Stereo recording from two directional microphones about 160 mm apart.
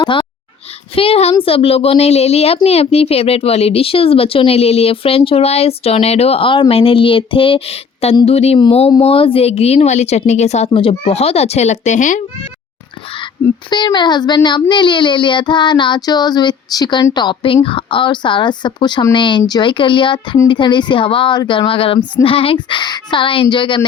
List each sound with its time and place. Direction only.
0.0 s a sound: 30° left (ahead or behind)
0.9 s speech: 35° left (ahead or behind)
13.7 s speech: 30° left (ahead or behind)